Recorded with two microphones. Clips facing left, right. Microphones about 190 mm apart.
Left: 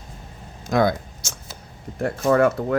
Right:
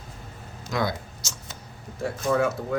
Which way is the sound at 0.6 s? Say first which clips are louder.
Left 8 dB; 50° left (ahead or behind).